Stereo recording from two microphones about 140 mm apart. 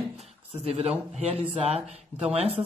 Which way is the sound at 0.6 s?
45° right (ahead or behind).